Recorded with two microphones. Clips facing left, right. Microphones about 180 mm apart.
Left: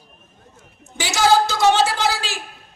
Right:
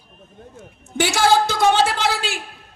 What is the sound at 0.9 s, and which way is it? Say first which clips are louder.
A woman's voice: even; 55° right (ahead or behind).